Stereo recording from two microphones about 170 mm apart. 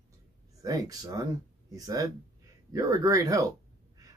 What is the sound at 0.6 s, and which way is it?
A woman's voice, 20° right (ahead or behind).